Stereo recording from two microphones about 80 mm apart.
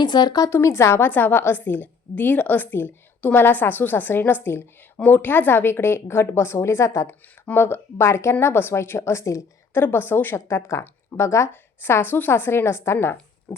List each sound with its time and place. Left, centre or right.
0.0 s a woman's voice: left
0.5 s a woman's voice: left
7.1 s a woman's voice: left
9.8 s a woman's voice: left